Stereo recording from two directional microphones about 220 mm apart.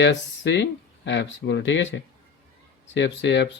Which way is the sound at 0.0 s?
55° left (ahead or behind).